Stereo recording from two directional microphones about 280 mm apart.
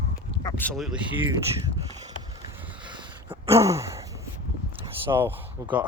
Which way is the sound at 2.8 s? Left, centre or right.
Centre.